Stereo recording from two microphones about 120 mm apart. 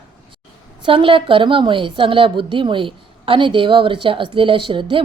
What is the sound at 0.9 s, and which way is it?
A woman's voice, 45° right (ahead or behind).